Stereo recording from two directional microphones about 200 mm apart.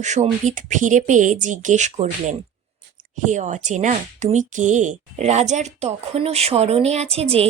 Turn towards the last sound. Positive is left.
turn(degrees=-30)  # may be behind; listen again after turning